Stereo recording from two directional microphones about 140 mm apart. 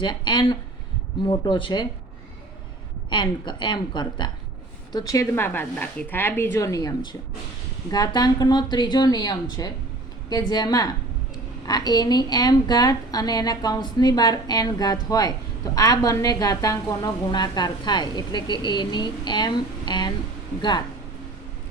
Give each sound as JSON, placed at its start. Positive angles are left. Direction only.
{"t": 0.0, "sound": "a woman's voice", "side_deg": 35}
{"t": 3.1, "sound": "a woman's voice", "side_deg": 35}